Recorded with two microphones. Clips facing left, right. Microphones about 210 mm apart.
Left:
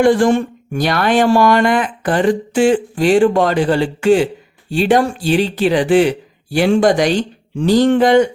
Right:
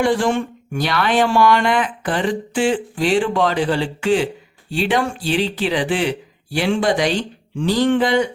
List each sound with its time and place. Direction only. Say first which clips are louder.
0.0 s speech: left 6 dB; 45° left (ahead or behind)